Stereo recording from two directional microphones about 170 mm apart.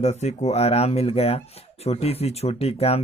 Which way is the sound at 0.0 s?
40° left (ahead or behind).